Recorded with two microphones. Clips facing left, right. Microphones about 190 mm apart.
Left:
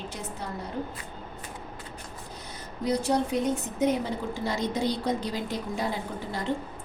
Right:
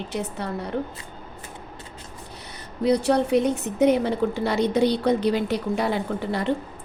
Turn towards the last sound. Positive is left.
turn(degrees=-65)  # may be behind; listen again after turning